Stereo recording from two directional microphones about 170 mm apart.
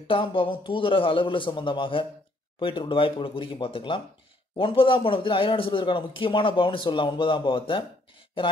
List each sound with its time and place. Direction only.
0.0 s a man's voice: 30° left (ahead or behind)